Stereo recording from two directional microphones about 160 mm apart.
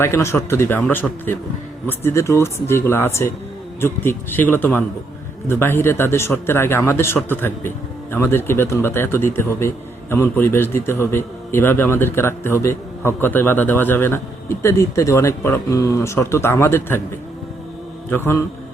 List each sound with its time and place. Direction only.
0.0 s a man's voice: 15° left (ahead or behind)
18.1 s a man's voice: 15° left (ahead or behind)